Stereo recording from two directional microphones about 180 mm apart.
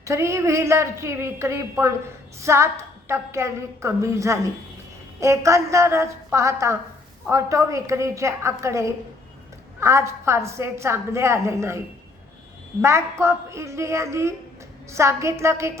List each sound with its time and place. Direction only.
0.0 s a woman's voice: 15° right (ahead or behind)
12.8 s a woman's voice: 15° right (ahead or behind)